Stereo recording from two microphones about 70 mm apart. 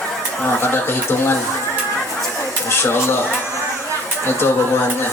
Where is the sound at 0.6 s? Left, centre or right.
Left.